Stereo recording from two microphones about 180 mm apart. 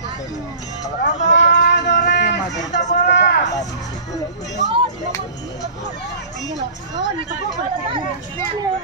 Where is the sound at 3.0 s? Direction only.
70° left (ahead or behind).